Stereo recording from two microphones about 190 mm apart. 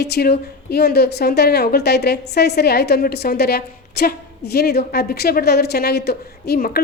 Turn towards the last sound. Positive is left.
turn(degrees=55)  # may be behind; listen again after turning